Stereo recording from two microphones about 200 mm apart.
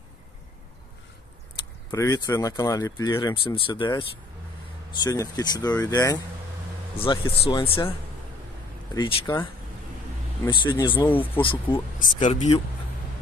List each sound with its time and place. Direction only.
1.9 s speech: 15° left (ahead or behind)
8.9 s speech: 20° left (ahead or behind)
11.1 s speech: 10° left (ahead or behind)
12.2 s speech: 35° left (ahead or behind)